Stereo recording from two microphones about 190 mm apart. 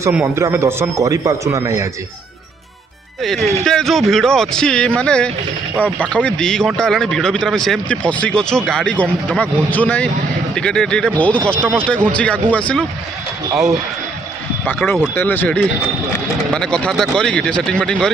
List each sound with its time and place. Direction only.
0.1 s speech: 15° right (ahead or behind)
3.2 s speech: centre (ahead or behind)
14.6 s speech: 5° left (ahead or behind)